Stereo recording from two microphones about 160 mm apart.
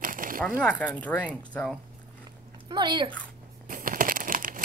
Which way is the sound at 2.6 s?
30° right (ahead or behind).